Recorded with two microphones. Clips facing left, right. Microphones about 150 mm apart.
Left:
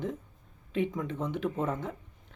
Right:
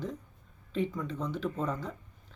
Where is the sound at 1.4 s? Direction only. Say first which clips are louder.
Left 3 dB; 25° left (ahead or behind).